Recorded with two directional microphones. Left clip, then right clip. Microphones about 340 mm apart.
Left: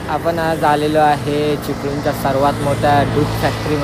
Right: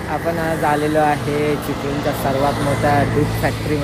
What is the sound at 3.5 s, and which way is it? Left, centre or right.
Speech, centre.